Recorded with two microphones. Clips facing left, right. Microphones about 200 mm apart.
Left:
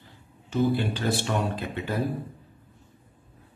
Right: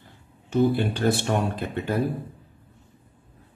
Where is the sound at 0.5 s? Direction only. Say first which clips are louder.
Right 3 dB; 55° right (ahead or behind).